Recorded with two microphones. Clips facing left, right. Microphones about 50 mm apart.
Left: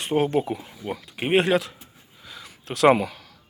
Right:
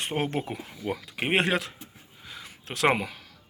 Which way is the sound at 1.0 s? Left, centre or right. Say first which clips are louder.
Left 1 dB; right.